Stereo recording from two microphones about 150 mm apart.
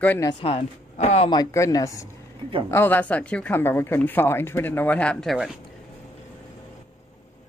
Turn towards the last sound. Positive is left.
turn(degrees=0)  # may be behind; listen again after turning